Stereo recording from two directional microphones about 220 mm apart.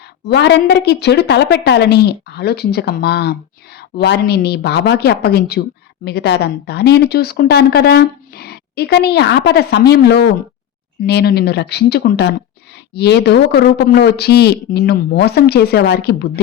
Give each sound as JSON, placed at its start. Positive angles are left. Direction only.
{"t": 0.3, "sound": "speech", "side_deg": 50}